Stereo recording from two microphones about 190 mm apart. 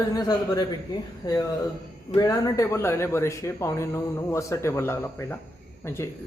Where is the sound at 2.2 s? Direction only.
20° left (ahead or behind).